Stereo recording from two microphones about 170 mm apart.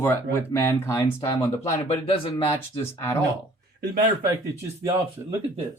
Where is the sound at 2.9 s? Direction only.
15° left (ahead or behind).